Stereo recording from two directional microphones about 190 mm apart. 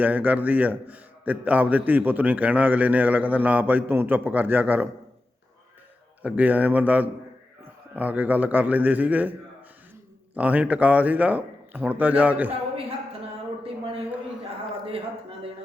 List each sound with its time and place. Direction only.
0.0 s a man's voice: 10° right (ahead or behind)
6.2 s a man's voice: 10° right (ahead or behind)
10.3 s a man's voice: 5° right (ahead or behind)
13.6 s a sound: 30° right (ahead or behind)